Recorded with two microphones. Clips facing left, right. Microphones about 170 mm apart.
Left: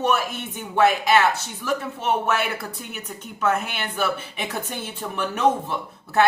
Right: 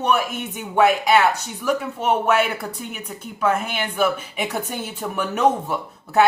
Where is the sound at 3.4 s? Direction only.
10° right (ahead or behind).